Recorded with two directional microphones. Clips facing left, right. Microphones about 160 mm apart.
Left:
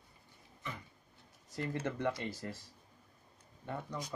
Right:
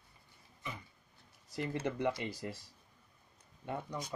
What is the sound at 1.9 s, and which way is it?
Speech, 15° right (ahead or behind).